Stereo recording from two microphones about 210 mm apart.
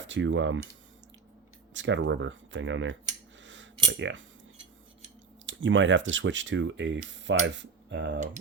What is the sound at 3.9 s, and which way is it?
Speech, 60° right (ahead or behind).